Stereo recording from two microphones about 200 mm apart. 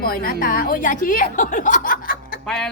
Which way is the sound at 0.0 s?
45° left (ahead or behind).